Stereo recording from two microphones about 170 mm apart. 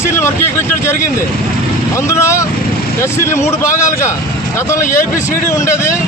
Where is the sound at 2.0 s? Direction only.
15° left (ahead or behind).